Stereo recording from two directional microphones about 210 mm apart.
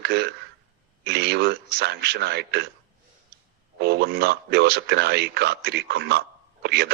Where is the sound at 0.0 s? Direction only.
50° right (ahead or behind).